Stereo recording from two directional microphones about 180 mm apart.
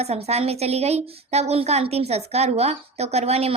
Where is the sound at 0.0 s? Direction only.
35° right (ahead or behind).